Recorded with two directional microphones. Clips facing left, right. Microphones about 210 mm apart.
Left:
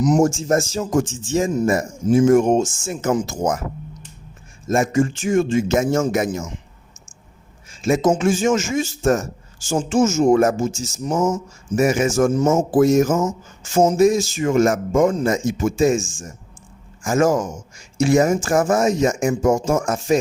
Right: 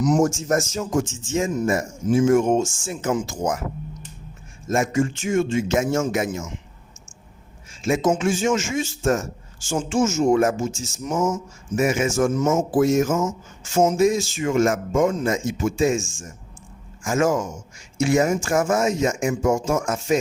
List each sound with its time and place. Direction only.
0.2 s speech: 30° left (ahead or behind)
4.7 s speech: 35° left (ahead or behind)
7.8 s speech: 40° left (ahead or behind)
17.0 s speech: 35° left (ahead or behind)